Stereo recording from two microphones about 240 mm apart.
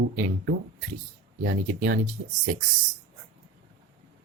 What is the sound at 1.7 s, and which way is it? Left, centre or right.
Speech, right.